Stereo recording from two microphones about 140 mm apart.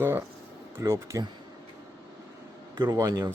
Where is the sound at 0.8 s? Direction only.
20° right (ahead or behind).